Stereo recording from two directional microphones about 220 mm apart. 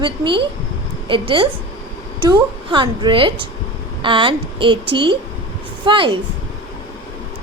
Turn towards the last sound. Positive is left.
turn(degrees=-20)  # may be behind; listen again after turning